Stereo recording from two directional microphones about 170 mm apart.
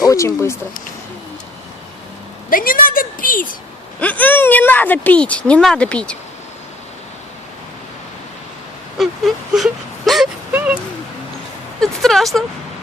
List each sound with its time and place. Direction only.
0.1 s speech: 20° left (ahead or behind)
2.5 s a woman's voice: 55° left (ahead or behind)
4.0 s a woman's voice: 10° left (ahead or behind)
9.0 s whimper: centre (ahead or behind)
11.8 s a sound: centre (ahead or behind)